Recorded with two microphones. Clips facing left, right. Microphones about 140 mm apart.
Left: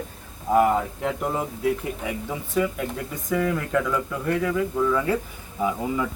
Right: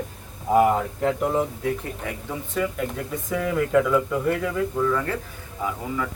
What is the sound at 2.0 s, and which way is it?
A man's voice, 10° left (ahead or behind).